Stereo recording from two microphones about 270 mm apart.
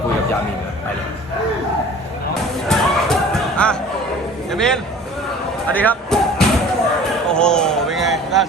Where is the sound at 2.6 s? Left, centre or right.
Centre.